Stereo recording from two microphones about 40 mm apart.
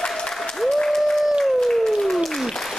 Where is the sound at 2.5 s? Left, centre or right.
Centre.